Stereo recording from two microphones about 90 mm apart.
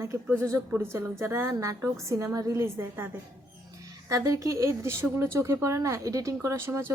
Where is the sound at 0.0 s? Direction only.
25° right (ahead or behind).